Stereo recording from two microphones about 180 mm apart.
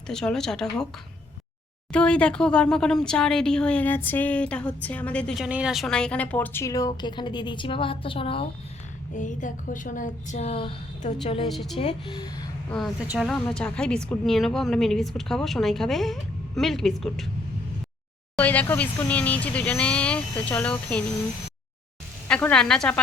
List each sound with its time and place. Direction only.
0.1 s a woman's voice: 5° left (ahead or behind)
1.9 s speech: 5° left (ahead or behind); by 8.4 s 30° left (ahead or behind)
9.1 s a woman's voice: 45° left (ahead or behind)
11.4 s a woman's voice: centre (ahead or behind)
11.8 s speech: 30° left (ahead or behind)
13.1 s a woman's voice: centre (ahead or behind)
18.3 s speech: 10° left (ahead or behind)
22.3 s a woman's voice: 5° left (ahead or behind)